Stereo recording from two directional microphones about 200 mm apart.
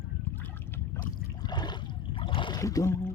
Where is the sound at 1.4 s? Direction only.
20° left (ahead or behind).